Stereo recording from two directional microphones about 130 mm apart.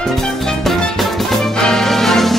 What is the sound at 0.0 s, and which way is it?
Music, centre (ahead or behind).